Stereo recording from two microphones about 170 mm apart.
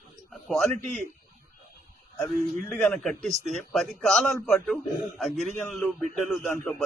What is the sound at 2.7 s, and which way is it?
Speech, 5° left (ahead or behind).